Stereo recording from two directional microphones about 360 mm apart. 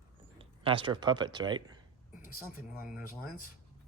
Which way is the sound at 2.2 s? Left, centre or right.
Left.